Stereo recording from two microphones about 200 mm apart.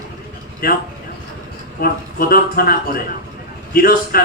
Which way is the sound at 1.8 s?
50° left (ahead or behind).